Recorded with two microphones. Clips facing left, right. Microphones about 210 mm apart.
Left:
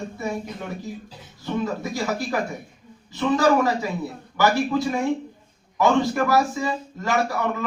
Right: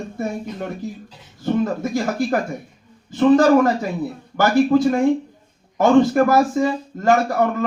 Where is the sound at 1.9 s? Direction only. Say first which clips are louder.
Right 5 dB; 50° right (ahead or behind).